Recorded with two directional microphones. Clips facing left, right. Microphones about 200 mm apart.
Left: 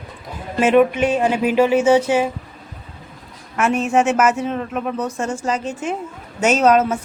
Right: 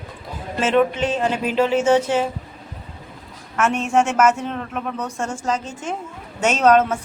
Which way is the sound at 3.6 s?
10° left (ahead or behind).